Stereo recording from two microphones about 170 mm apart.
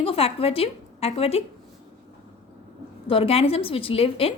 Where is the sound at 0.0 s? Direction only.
35° left (ahead or behind).